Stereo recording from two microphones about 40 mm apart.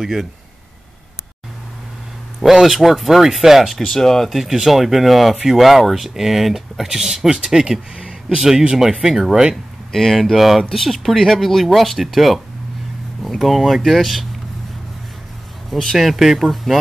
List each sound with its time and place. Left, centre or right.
0.0 s speech: centre
2.4 s speech: centre
3.8 s speech: centre
4.3 s speech: centre
6.9 s speech: centre
9.9 s speech: centre
15.7 s speech: centre
16.7 s speech: centre